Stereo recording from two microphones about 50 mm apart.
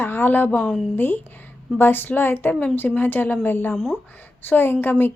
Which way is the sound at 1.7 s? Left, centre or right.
Left.